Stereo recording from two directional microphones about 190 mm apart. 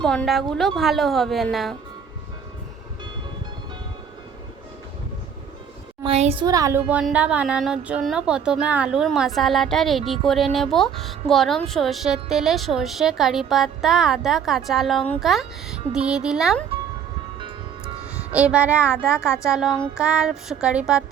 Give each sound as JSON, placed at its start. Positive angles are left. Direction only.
{"t": 0.0, "sound": "a woman's voice", "side_deg": 0}
{"t": 6.0, "sound": "a child's voice", "side_deg": -30}
{"t": 6.4, "sound": "a woman's voice", "side_deg": -20}
{"t": 18.3, "sound": "a woman's voice", "side_deg": -5}